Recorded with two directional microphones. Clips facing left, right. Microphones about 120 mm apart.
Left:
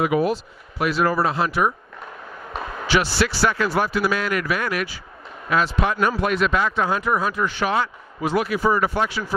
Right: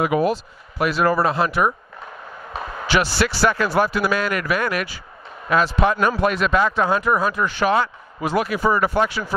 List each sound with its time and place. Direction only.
0.0 s speech: 50° right (ahead or behind)
2.5 s a sound: centre (ahead or behind)
3.2 s speech: 50° right (ahead or behind)
5.5 s speech: 40° right (ahead or behind)